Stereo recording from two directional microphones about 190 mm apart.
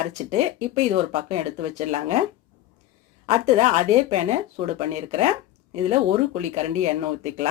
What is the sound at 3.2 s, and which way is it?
Speech, 35° right (ahead or behind).